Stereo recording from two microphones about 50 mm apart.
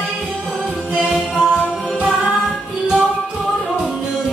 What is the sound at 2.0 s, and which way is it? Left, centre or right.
Music, right.